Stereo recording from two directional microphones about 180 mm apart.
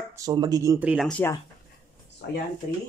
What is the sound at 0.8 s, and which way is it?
Speech, 5° right (ahead or behind).